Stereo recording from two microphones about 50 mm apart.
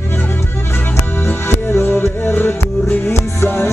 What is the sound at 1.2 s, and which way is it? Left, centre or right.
Music, left.